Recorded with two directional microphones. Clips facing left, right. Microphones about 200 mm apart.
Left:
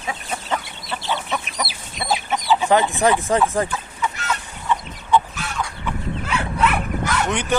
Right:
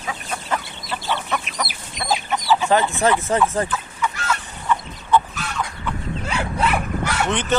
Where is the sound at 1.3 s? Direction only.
5° left (ahead or behind).